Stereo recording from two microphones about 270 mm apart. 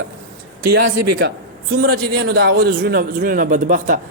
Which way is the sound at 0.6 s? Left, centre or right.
Right.